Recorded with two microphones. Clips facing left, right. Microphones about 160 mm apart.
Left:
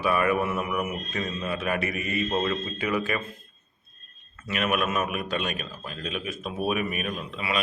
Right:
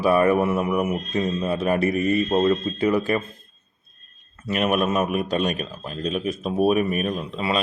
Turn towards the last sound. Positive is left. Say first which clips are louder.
# right 5 dB
turn(degrees=-30)  # may be behind; listen again after turning